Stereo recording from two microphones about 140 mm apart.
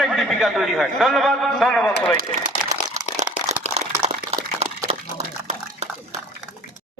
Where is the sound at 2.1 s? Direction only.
70° right (ahead or behind).